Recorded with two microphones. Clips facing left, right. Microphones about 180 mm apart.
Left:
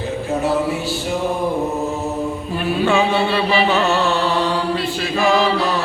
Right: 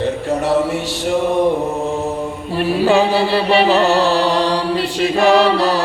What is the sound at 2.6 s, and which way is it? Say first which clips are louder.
Chant: right 4 dB; 35° right (ahead or behind).